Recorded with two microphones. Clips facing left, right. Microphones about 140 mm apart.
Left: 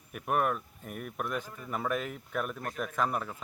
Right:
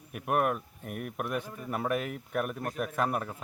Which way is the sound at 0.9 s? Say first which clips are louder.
Right 3 dB; 55° right (ahead or behind).